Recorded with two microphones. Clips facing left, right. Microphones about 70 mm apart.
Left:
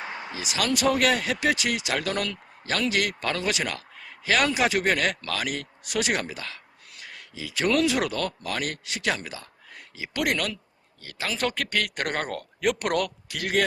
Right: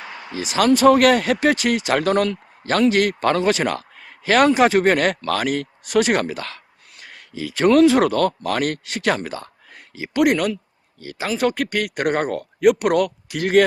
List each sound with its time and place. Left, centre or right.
0.0 s a sound: left
0.3 s speech: right
0.9 s speech: right
7.0 s speech: right
10.2 s speech: centre
13.4 s speech: right